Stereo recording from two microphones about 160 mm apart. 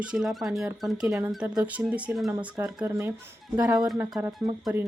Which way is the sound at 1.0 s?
20° right (ahead or behind).